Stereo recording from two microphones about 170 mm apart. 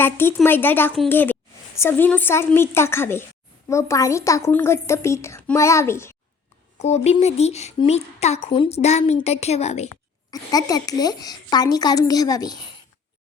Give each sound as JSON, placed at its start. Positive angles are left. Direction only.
{"t": 0.0, "sound": "a woman's voice", "side_deg": 15}
{"t": 6.7, "sound": "speech", "side_deg": 40}
{"t": 10.3, "sound": "a woman's voice", "side_deg": 20}